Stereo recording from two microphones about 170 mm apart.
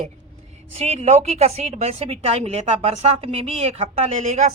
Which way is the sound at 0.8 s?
40° right (ahead or behind).